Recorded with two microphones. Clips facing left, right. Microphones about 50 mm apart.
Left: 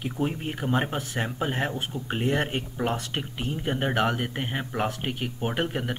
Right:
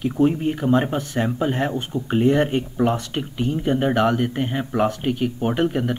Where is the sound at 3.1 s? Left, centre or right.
Centre.